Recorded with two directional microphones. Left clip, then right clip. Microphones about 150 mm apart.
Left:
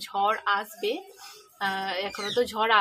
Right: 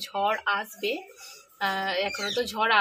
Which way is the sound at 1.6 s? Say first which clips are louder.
Right 2 dB; 20° left (ahead or behind).